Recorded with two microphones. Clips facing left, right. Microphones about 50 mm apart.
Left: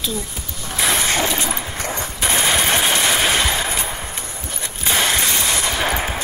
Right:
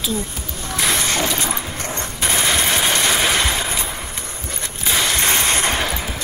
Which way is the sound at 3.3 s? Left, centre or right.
Left.